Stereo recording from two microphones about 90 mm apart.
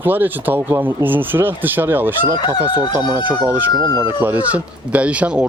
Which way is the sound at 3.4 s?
20° right (ahead or behind).